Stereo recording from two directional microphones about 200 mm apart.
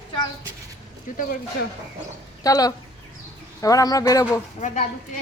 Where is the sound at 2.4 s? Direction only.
20° left (ahead or behind).